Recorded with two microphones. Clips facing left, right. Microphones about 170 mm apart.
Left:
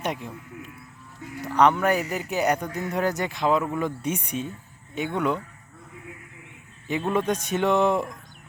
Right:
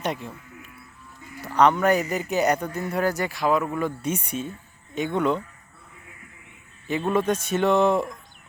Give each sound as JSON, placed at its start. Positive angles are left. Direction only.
{"t": 0.0, "sound": "speech", "side_deg": 15}
{"t": 6.8, "sound": "speech", "side_deg": 15}